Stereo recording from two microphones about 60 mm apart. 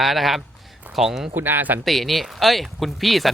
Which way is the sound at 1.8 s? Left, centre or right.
Centre.